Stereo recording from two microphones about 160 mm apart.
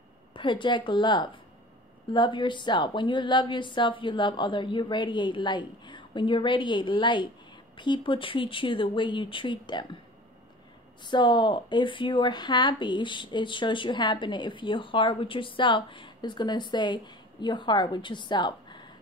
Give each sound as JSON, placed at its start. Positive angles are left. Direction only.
{"t": 0.3, "sound": "speech", "side_deg": 30}
{"t": 11.1, "sound": "speech", "side_deg": 30}